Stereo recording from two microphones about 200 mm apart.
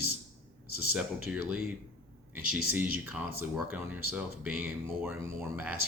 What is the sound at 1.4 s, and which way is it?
Speech, 50° left (ahead or behind).